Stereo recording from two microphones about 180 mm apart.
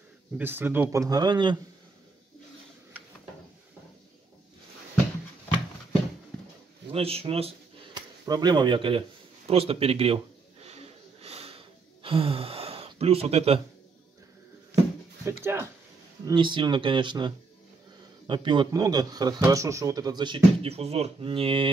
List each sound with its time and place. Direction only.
0.4 s a man's voice: 10° right (ahead or behind)
6.9 s a sound: 35° right (ahead or behind)
8.3 s a man's voice: 20° right (ahead or behind)
9.5 s a sound: 35° right (ahead or behind)
15.2 s speech: 15° right (ahead or behind)
16.3 s a man's voice: 25° right (ahead or behind)